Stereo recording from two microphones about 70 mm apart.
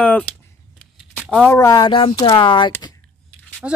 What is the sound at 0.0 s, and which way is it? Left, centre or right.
Speech, left.